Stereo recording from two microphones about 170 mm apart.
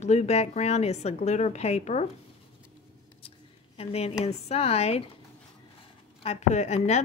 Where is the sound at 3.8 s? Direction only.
35° left (ahead or behind).